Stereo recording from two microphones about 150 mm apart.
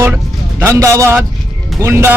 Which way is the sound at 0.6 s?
20° right (ahead or behind).